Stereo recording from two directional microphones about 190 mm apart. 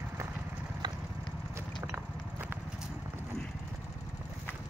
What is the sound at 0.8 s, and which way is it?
Vehicle, 20° right (ahead or behind).